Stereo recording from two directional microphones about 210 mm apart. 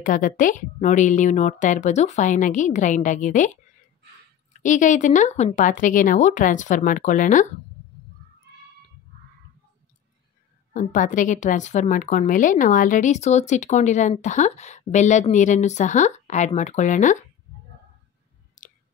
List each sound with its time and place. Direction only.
0.0 s a woman's voice: 40° left (ahead or behind)
4.6 s a woman's voice: 35° left (ahead or behind)
10.7 s a woman's voice: 35° left (ahead or behind)
18.6 s a sound: 35° left (ahead or behind)